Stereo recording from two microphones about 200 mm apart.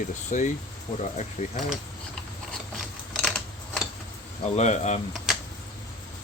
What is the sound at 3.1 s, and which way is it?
Scissors, 5° left (ahead or behind).